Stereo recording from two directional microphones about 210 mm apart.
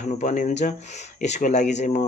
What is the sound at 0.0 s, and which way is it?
Speech, 35° left (ahead or behind).